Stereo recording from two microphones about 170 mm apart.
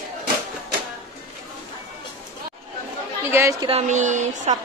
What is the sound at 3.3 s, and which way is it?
Speech, 15° right (ahead or behind).